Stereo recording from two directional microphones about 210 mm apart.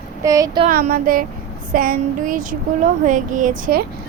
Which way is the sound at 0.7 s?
40° right (ahead or behind).